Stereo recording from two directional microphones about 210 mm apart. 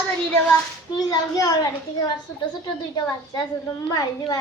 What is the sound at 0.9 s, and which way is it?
A woman's voice, 20° left (ahead or behind).